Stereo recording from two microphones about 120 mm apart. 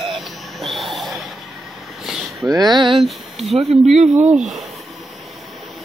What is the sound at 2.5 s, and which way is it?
Speech, 35° right (ahead or behind).